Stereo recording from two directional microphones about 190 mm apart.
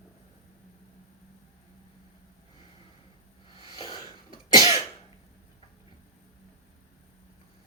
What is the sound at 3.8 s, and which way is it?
Cough, 25° left (ahead or behind).